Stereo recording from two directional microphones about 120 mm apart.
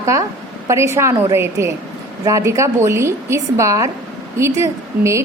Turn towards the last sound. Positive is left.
turn(degrees=-25)  # may be behind; listen again after turning